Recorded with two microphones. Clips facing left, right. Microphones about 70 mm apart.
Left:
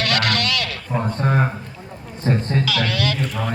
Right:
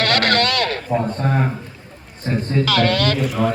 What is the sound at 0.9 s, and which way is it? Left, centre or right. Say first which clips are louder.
Speech: right 1 dB; centre.